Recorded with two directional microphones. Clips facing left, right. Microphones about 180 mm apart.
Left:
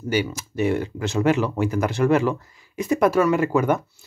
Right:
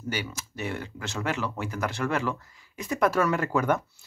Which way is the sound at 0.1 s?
15° left (ahead or behind).